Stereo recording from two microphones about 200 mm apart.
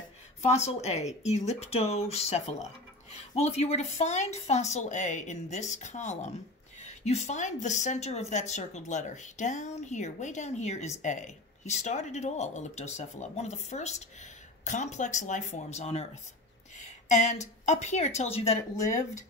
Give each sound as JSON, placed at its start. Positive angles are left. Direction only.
{"t": 0.7, "sound": "a woman's voice", "side_deg": 30}
{"t": 18.8, "sound": "speech", "side_deg": 15}